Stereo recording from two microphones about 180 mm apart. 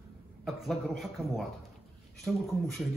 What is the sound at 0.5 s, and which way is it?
Speech, centre (ahead or behind).